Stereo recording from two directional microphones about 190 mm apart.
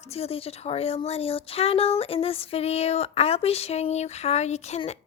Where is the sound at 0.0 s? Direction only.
30° left (ahead or behind).